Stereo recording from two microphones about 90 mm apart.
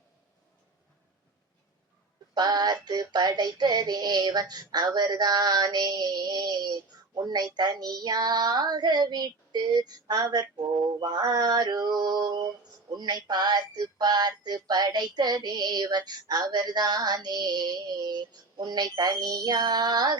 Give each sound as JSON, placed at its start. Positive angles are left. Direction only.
{"t": 2.3, "sound": "child singing", "side_deg": -50}